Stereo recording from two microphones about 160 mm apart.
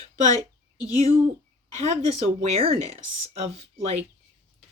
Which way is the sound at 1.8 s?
40° right (ahead or behind).